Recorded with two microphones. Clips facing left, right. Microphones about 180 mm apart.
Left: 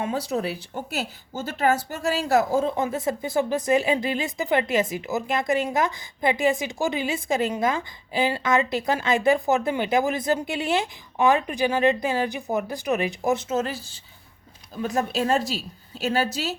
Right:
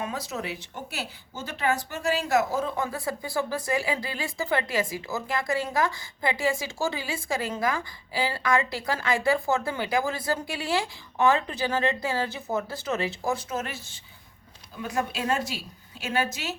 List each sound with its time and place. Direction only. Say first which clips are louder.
0.0 s a woman's voice: left 6 dB; 30° left (ahead or behind)